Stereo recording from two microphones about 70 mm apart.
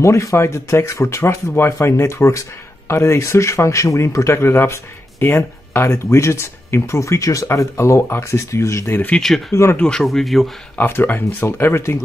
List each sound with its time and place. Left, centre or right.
0.0 s speech: left
7.4 s speech: left
9.8 s speech: centre
10.0 s speech: centre
10.8 s speech: left